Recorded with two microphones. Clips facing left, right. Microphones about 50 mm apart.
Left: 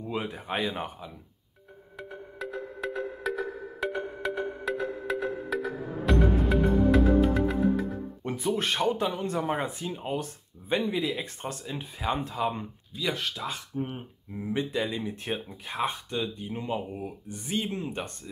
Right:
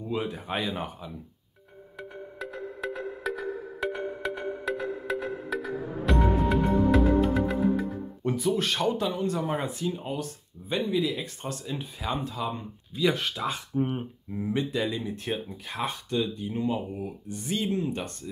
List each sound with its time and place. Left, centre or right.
0.0 s speech: left
2.0 s music: centre
8.2 s speech: left
12.9 s speech: centre
13.7 s speech: right
14.5 s speech: centre